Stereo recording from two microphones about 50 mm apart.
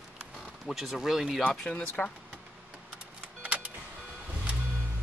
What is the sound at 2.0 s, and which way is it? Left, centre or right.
Speech, left.